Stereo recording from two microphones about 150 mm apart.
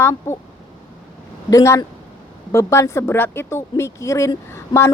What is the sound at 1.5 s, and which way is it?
A man's voice, 20° left (ahead or behind).